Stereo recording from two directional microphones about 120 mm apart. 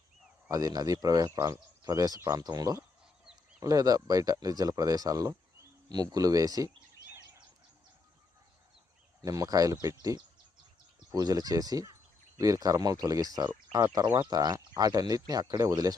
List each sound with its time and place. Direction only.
0.4 s speech: 30° right (ahead or behind)
9.2 s speech: 30° right (ahead or behind)